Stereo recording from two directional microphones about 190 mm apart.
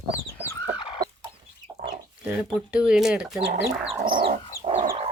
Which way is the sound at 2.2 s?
5° right (ahead or behind).